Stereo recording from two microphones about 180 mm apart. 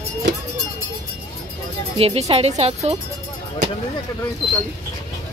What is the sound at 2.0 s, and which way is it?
Speech, 35° right (ahead or behind).